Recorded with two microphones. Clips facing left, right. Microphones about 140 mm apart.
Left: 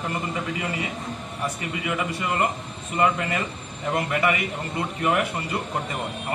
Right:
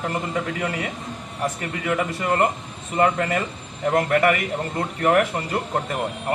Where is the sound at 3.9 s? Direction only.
60° right (ahead or behind).